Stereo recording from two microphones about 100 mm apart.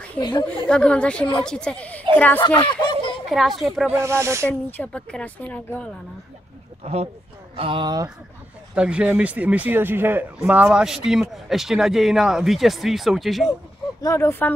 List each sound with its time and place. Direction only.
0.2 s a woman's voice: 50° left (ahead or behind)
0.7 s speech: 10° left (ahead or behind)
2.7 s a woman's voice: 50° left (ahead or behind)
3.3 s speech: centre (ahead or behind)
3.9 s speech: 30° right (ahead or behind)
4.6 s speech: 20° left (ahead or behind)
6.8 s speech: 90° right
7.5 s speech: 60° right (ahead or behind)
8.7 s speech: 10° right (ahead or behind)
14.0 s speech: 30° left (ahead or behind)